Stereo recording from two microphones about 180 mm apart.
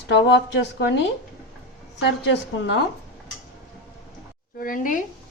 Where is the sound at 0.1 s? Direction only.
75° left (ahead or behind).